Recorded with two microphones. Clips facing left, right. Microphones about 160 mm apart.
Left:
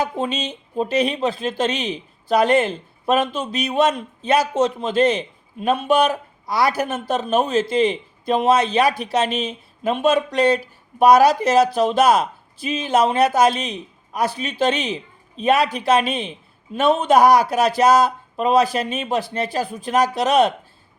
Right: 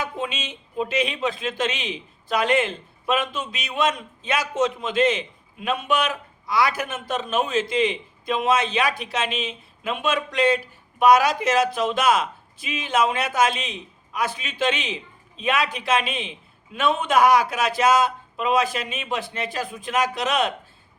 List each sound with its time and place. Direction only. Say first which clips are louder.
0.0 s speech: left 6 dB; 35° left (ahead or behind)